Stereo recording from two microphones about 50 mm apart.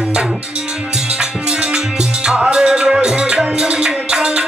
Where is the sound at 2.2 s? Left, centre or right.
Centre.